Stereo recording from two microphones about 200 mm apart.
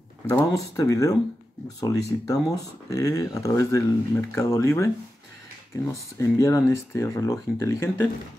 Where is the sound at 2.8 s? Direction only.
15° left (ahead or behind).